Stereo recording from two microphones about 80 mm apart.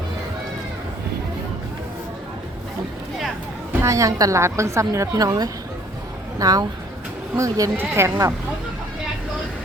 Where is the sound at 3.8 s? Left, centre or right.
Right.